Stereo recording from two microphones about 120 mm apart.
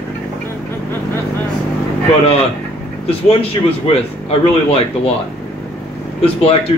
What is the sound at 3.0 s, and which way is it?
A man's voice, 55° left (ahead or behind).